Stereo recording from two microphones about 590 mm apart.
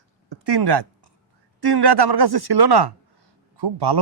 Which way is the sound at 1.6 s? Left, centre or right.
Right.